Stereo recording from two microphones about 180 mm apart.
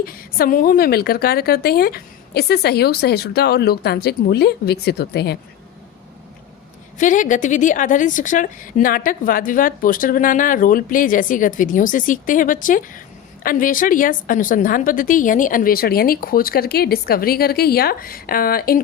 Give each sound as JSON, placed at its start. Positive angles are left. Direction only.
{"t": 0.0, "sound": "a woman's voice", "side_deg": 55}
{"t": 7.0, "sound": "a woman's voice", "side_deg": 45}